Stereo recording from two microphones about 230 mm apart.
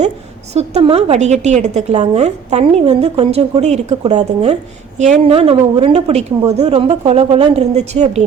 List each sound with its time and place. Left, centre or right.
0.5 s a woman's voice: right